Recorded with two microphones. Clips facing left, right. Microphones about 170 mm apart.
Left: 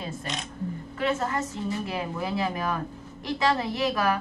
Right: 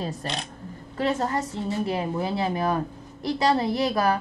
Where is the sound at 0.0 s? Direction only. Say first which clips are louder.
Right 3 dB; 35° right (ahead or behind).